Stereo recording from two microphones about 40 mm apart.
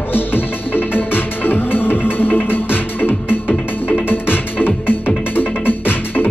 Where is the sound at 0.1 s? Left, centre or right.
Left.